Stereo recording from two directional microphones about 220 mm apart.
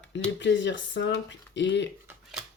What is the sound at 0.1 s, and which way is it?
Speech, 55° left (ahead or behind).